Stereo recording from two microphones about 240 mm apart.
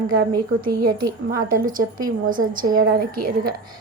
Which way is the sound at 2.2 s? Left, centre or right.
Right.